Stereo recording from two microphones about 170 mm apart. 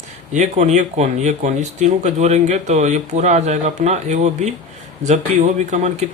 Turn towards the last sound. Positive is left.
turn(degrees=-40)  # may be behind; listen again after turning